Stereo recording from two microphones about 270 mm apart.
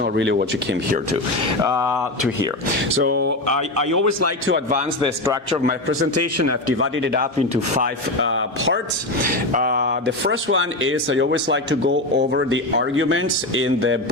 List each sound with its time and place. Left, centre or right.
0.0 s speech: right
3.0 s speech: right
5.2 s a man's voice: centre
6.0 s speech: right
6.7 s speech: right
7.5 s speech: right
8.2 s speech: right
9.5 s speech: right